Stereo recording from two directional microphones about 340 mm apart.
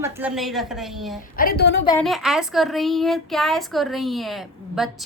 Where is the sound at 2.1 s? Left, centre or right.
Centre.